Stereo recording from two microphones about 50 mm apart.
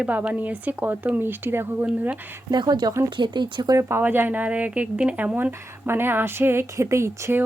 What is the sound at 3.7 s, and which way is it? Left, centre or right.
Speech, right.